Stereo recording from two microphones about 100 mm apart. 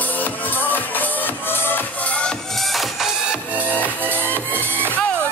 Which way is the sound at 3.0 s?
10° right (ahead or behind).